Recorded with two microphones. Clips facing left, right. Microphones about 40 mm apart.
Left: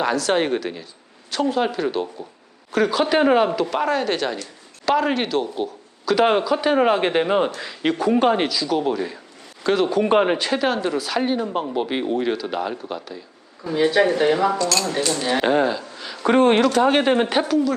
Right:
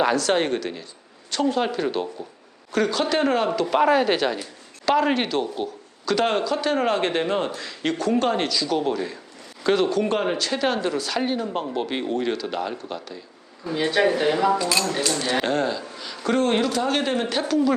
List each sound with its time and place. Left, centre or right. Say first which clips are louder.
0.0 s speech: even; centre
3.7 s speech: right 3 dB; centre
9.9 s speech: left 4 dB; centre
10.2 s speech: left 5 dB; left
10.6 s speech: left 2 dB; centre
14.5 s speech: even; centre
14.9 s speech: left 2 dB; centre
16.2 s speech: left 5 dB; left